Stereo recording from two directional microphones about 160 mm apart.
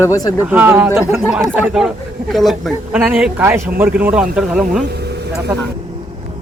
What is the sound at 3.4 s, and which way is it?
Speech, 15° right (ahead or behind).